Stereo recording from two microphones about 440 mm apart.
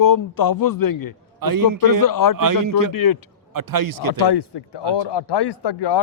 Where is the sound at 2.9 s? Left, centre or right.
Left.